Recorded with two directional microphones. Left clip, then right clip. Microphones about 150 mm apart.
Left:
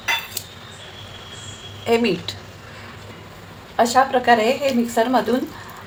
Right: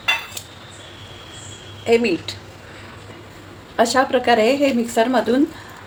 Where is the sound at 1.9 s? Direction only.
10° right (ahead or behind).